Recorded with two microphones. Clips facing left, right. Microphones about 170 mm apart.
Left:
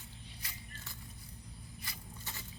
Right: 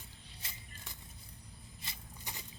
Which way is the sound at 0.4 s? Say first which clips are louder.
Even; 25° right (ahead or behind).